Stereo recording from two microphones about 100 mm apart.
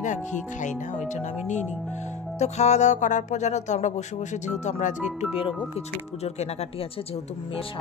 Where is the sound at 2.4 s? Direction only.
90° left.